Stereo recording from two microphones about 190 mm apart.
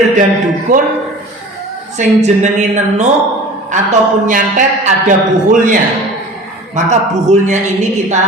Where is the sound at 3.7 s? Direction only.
40° right (ahead or behind).